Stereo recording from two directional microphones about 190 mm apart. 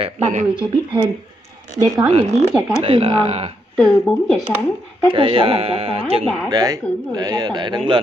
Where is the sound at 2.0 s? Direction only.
35° right (ahead or behind).